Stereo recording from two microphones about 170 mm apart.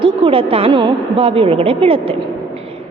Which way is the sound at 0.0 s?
30° right (ahead or behind).